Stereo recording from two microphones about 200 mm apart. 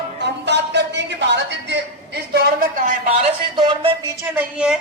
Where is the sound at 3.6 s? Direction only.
20° right (ahead or behind).